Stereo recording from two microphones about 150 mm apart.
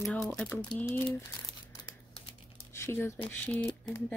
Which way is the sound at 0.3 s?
5° left (ahead or behind).